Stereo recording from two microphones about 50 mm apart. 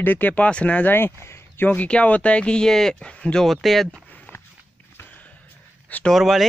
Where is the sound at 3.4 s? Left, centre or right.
Centre.